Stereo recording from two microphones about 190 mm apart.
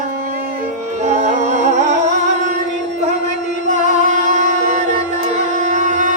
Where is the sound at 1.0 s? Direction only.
35° right (ahead or behind).